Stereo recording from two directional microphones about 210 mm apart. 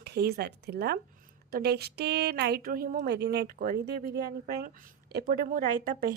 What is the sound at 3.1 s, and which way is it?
Speech, 55° right (ahead or behind).